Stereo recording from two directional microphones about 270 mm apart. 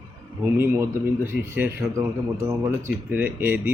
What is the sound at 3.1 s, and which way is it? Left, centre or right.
Speech, centre.